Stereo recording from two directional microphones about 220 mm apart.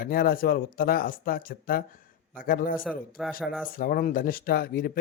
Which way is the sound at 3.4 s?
Centre (ahead or behind).